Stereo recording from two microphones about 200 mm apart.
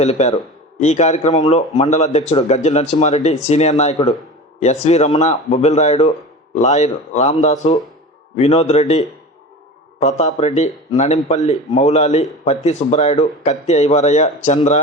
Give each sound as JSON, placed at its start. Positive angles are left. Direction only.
{"t": 0.0, "sound": "speech", "side_deg": 35}
{"t": 10.0, "sound": "speech", "side_deg": 35}